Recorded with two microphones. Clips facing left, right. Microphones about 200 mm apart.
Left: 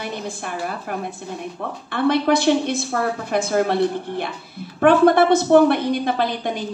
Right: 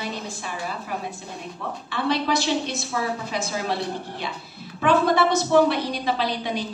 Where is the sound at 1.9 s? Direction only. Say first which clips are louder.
Left 6 dB; 55° left (ahead or behind).